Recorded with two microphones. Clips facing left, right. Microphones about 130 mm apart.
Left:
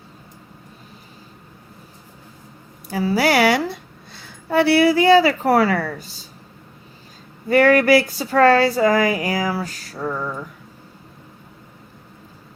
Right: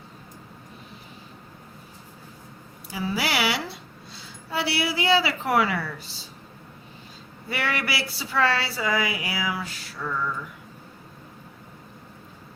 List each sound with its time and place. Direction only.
2.9 s a woman's voice: 40° left (ahead or behind)
7.4 s speech: 45° left (ahead or behind)